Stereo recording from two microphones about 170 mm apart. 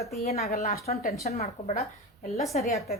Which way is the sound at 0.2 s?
40° left (ahead or behind).